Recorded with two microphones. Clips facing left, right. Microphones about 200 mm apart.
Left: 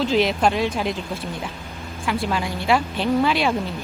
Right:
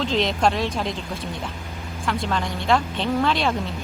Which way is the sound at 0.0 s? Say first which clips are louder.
Left 2 dB; 5° left (ahead or behind).